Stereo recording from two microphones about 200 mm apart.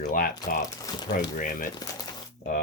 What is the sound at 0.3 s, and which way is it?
Speech, 20° left (ahead or behind).